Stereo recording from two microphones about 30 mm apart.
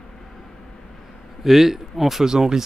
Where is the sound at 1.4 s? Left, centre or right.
Centre.